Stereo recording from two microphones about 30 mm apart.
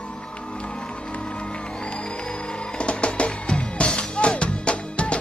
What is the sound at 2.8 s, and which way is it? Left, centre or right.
Music, left.